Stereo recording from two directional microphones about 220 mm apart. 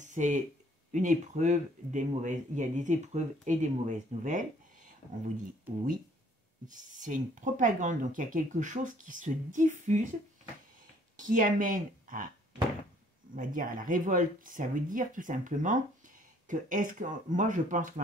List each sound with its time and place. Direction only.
0.0 s a sound: 35° right (ahead or behind)
0.9 s speech: 35° right (ahead or behind)
6.7 s speech: 35° right (ahead or behind)
11.1 s speech: 35° right (ahead or behind)
13.3 s speech: 40° right (ahead or behind)